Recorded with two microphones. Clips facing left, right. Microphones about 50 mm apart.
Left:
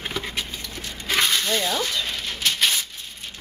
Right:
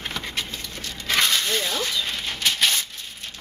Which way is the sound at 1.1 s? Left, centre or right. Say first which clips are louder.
Even; centre.